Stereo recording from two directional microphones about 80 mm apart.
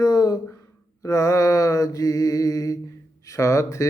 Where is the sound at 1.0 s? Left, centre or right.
Left.